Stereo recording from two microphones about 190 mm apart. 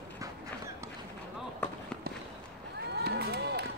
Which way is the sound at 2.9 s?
60° right (ahead or behind).